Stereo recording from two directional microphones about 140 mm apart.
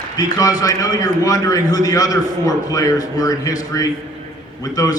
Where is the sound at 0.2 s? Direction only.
25° left (ahead or behind).